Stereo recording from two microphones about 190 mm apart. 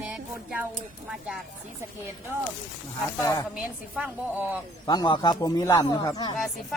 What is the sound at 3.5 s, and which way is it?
A woman's voice, 5° right (ahead or behind).